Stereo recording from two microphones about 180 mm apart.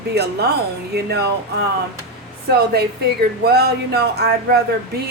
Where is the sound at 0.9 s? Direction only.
65° right (ahead or behind).